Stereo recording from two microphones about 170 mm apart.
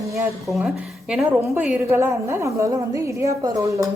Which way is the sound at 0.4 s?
Centre (ahead or behind).